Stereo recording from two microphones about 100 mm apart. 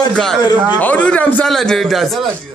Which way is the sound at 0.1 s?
5° left (ahead or behind).